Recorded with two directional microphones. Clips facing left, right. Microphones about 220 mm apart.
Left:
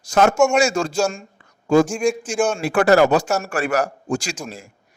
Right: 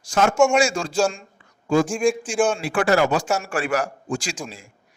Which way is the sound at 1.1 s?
45° left (ahead or behind).